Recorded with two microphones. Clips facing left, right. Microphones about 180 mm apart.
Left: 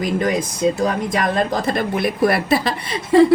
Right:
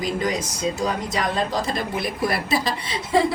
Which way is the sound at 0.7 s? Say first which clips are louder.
Left 5 dB; 55° left (ahead or behind).